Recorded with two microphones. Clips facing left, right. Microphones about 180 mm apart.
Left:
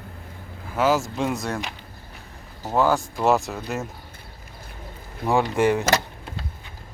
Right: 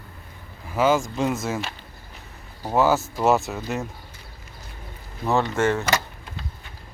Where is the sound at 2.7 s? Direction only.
5° right (ahead or behind).